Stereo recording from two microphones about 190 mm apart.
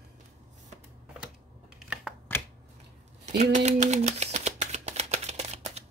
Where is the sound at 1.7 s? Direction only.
Centre (ahead or behind).